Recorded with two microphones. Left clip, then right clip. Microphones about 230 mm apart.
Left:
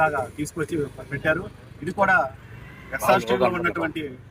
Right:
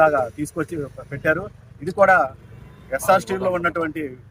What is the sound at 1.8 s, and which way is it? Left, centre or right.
Speech, right.